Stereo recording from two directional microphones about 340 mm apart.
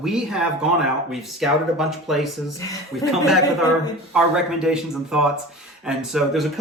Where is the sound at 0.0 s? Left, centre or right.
Centre.